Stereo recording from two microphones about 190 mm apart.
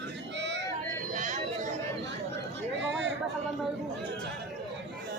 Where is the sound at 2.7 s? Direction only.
70° right (ahead or behind).